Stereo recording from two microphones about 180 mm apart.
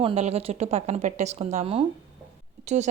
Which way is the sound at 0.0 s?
35° right (ahead or behind).